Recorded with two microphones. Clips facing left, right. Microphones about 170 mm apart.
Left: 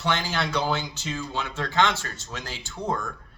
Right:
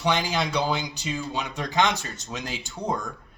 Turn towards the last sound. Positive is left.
turn(degrees=-15)  # may be behind; listen again after turning